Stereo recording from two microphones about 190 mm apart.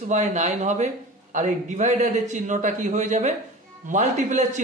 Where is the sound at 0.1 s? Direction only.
40° right (ahead or behind).